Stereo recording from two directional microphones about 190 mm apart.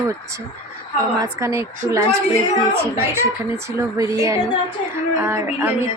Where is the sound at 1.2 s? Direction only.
15° right (ahead or behind).